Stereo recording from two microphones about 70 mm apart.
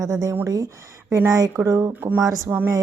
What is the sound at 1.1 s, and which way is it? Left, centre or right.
Speech, right.